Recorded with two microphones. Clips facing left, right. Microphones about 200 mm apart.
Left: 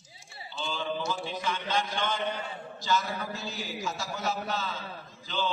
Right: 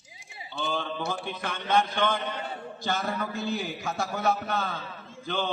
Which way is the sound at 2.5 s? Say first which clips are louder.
Left 1 dB; 60° right (ahead or behind).